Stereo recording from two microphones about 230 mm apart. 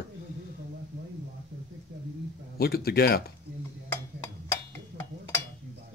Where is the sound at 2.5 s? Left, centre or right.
Left.